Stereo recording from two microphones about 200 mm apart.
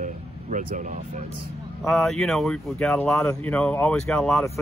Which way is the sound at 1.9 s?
Centre (ahead or behind).